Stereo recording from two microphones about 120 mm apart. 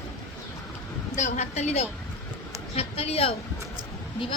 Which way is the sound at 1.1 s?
80° left.